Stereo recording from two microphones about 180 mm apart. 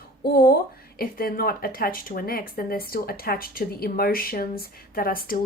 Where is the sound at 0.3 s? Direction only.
55° left (ahead or behind).